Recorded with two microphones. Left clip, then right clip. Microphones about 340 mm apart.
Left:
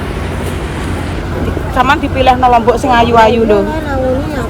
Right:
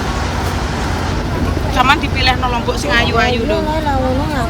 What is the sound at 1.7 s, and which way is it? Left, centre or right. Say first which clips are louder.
Speech: left 3 dB; centre.